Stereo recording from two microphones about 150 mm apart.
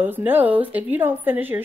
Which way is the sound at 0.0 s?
15° right (ahead or behind).